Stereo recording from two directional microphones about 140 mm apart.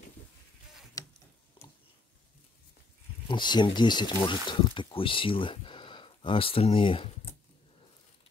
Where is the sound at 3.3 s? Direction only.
35° left (ahead or behind).